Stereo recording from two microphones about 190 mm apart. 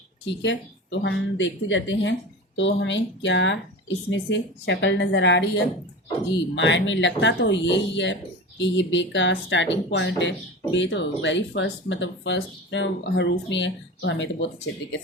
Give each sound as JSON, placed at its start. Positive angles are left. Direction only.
{"t": 0.3, "sound": "speech", "side_deg": 70}